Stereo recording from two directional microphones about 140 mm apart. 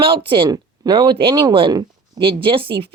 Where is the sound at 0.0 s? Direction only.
40° right (ahead or behind).